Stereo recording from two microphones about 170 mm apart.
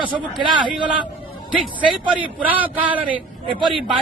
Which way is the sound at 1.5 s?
5° right (ahead or behind).